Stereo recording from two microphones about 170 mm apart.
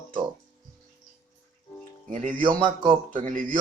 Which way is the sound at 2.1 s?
50° right (ahead or behind).